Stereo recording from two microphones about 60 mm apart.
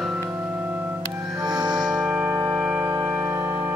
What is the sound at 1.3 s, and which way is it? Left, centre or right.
Music, centre.